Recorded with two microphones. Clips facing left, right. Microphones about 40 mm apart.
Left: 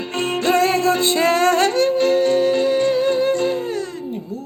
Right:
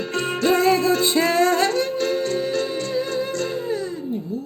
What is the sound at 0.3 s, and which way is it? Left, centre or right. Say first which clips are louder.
Music: left 1 dB; left.